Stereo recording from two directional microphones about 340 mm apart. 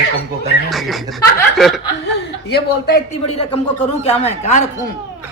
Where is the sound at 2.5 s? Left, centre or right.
Left.